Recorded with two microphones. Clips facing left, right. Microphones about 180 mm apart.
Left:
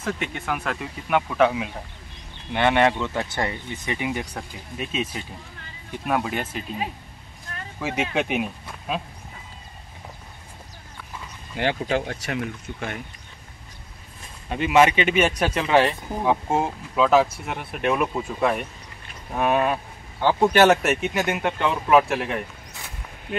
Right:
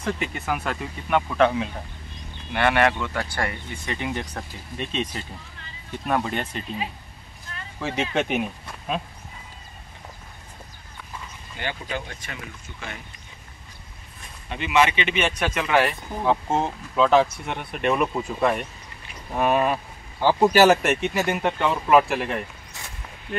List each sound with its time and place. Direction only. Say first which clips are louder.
0.0 s speech: right 1 dB; centre (ahead or behind)
2.5 s speech: left 1 dB; 20° left (ahead or behind); by 6.8 s 5° left (ahead or behind)
7.8 s speech: even; 5° left (ahead or behind)
11.5 s speech: left 7 dB; 75° left (ahead or behind); by 13.0 s 55° left (ahead or behind)
14.5 s speech: left 4 dB; 45° left (ahead or behind); by 15.9 s 30° left (ahead or behind)
16.2 s speech: even; 10° left (ahead or behind)